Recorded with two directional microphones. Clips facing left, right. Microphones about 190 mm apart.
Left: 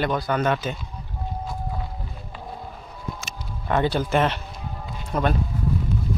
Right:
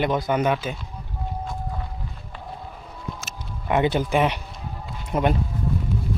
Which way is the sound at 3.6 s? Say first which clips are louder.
Right 1 dB; 15° right (ahead or behind).